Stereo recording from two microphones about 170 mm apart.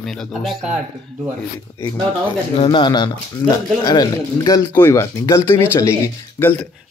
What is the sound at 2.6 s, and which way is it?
Speech, 30° left (ahead or behind).